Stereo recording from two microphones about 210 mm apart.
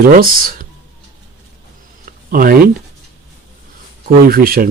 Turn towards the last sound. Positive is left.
turn(degrees=-45)  # may be behind; listen again after turning